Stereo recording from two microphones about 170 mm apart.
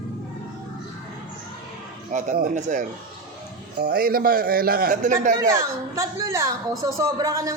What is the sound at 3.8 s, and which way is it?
A man's voice, 60° right (ahead or behind).